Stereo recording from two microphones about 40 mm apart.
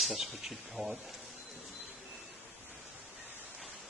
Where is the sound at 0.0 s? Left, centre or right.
Centre.